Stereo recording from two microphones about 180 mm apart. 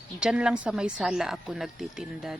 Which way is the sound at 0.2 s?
5° right (ahead or behind).